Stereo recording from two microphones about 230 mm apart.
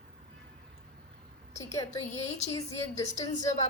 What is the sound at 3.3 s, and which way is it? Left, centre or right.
Speech, left.